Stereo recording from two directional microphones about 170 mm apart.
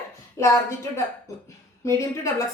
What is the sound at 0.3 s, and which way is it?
A woman's voice, 15° left (ahead or behind).